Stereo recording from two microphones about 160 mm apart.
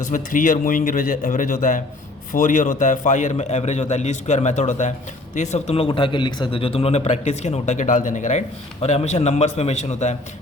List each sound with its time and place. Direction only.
0.1 s a man's voice: 60° left (ahead or behind)